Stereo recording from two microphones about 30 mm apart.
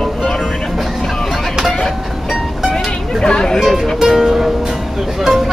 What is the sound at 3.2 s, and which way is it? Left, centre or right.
Speech, left.